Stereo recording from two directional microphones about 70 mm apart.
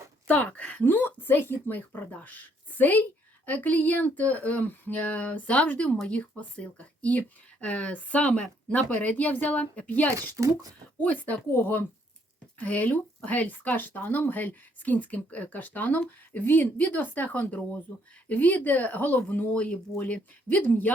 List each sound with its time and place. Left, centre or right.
0.3 s a woman's voice: left
10.2 s a child's voice: right
11.0 s a woman's voice: left